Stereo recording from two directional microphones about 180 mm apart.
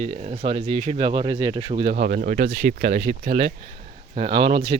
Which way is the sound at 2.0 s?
50° right (ahead or behind).